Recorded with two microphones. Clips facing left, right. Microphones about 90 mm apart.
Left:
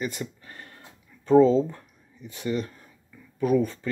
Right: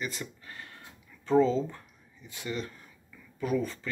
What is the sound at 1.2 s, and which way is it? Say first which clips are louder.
Speech: left 7 dB; 30° left (ahead or behind).